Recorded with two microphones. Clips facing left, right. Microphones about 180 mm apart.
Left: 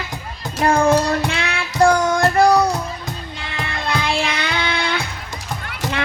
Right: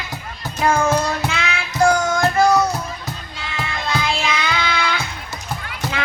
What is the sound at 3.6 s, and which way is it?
Music, 60° left (ahead or behind).